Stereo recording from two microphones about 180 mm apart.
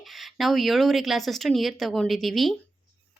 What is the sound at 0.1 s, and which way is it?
A woman's voice, centre (ahead or behind).